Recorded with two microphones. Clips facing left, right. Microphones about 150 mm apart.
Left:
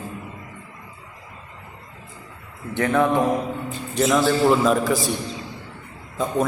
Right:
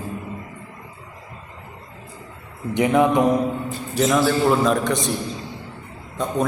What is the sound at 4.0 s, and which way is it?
A man's voice, centre (ahead or behind).